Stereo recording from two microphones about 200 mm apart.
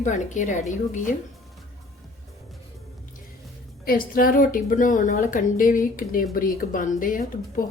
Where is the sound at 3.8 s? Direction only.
45° left (ahead or behind).